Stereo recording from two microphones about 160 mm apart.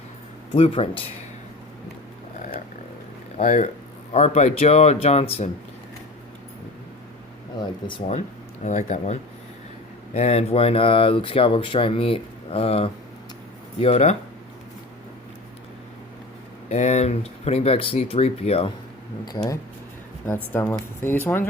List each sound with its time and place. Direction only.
0.5 s speech: 40° left (ahead or behind)
3.3 s speech: 50° left (ahead or behind)
7.6 s speech: 30° left (ahead or behind)
8.6 s speech: 45° left (ahead or behind)
16.6 s speech: 45° left (ahead or behind)
20.2 s speech: 15° left (ahead or behind)